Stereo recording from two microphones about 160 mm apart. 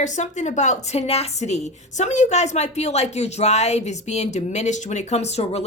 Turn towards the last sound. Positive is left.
turn(degrees=40)  # may be behind; listen again after turning